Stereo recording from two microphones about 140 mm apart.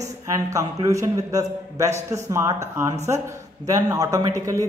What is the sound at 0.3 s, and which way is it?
A man's voice, 20° right (ahead or behind).